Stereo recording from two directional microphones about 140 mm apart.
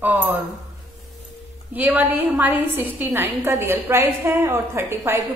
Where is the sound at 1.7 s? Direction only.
10° right (ahead or behind).